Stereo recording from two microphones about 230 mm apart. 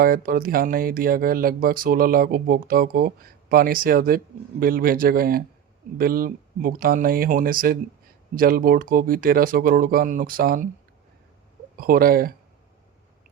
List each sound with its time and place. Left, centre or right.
0.0 s speech: right
11.8 s speech: right